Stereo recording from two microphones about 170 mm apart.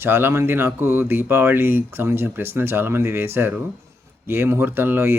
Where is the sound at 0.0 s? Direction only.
15° right (ahead or behind).